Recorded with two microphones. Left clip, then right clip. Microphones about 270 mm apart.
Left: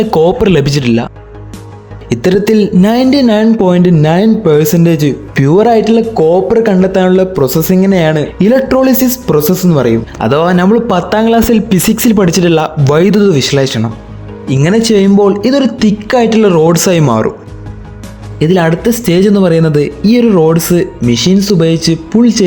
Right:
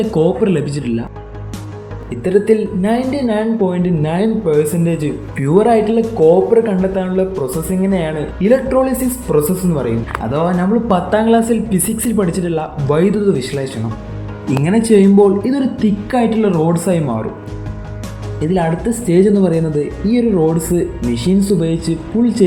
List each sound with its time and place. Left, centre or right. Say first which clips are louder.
0.1 s speech: left 7 dB; left
2.0 s speech: left 3 dB; left
18.3 s speech: left 7 dB; left